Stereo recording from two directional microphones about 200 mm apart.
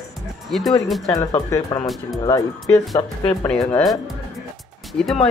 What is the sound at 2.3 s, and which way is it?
Speech, 15° left (ahead or behind).